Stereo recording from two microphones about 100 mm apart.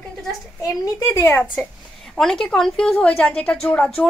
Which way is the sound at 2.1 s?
5° left (ahead or behind).